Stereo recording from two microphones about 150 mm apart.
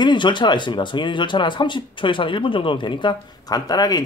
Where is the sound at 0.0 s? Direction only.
30° left (ahead or behind).